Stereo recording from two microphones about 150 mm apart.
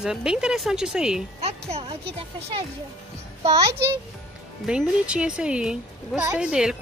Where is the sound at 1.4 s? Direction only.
45° right (ahead or behind).